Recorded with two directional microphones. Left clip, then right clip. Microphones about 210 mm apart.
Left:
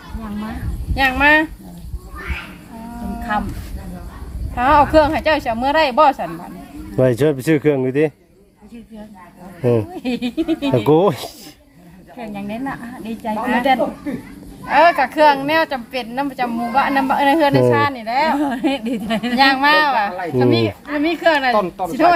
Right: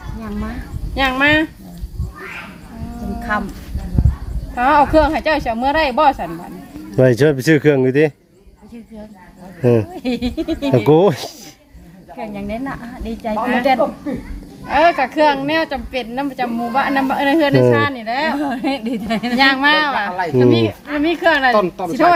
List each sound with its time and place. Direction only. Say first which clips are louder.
0.9 s speech: left 1 dB; 20° left (ahead or behind)
4.5 s a woman's voice: even; 10° left (ahead or behind)
6.9 s speech: right 3 dB; 15° right (ahead or behind)
9.6 s speech: right 2 dB; 15° right (ahead or behind)
13.4 s a woman's voice: right 1 dB; 15° left (ahead or behind)
14.7 s a woman's voice: left 1 dB; 15° left (ahead or behind)
18.3 s speech: left 1 dB; 10° right (ahead or behind)
19.4 s a woman's voice: even; 20° left (ahead or behind)
21.5 s a woman's voice: right 2 dB; 55° right (ahead or behind)